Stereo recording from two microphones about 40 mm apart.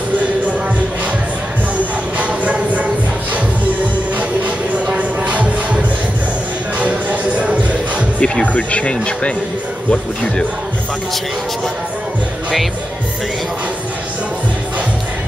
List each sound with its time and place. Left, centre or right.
2.1 s a sound: right
4.9 s music: right
8.2 s speech: left